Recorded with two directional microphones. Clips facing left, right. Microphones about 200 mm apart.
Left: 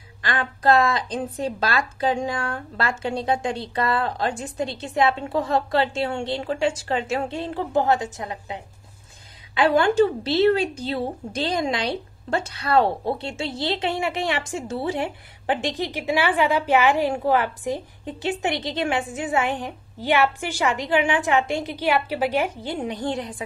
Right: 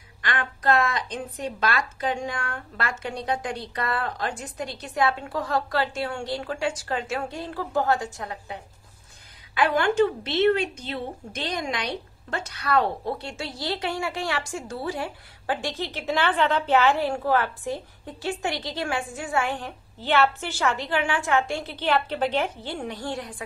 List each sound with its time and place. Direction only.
0.2 s a woman's voice: 30° left (ahead or behind)
9.6 s a woman's voice: 30° left (ahead or behind)